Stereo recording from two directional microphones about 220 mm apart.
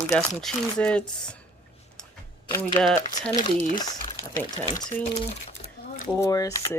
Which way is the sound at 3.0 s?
35° left (ahead or behind).